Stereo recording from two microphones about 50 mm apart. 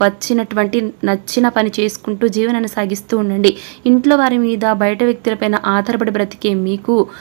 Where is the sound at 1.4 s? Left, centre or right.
Centre.